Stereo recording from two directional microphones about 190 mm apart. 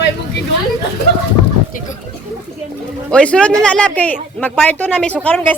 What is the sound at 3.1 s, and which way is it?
Speech, 5° left (ahead or behind).